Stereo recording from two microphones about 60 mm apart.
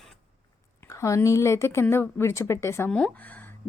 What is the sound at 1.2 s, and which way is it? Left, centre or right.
A woman's voice, left.